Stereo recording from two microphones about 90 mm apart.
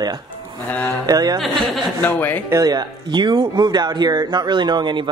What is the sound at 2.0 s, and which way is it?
Speech, 20° left (ahead or behind).